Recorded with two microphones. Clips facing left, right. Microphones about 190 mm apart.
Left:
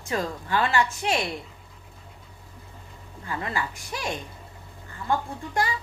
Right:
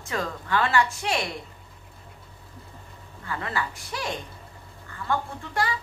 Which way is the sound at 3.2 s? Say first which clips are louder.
Even; 20° left (ahead or behind).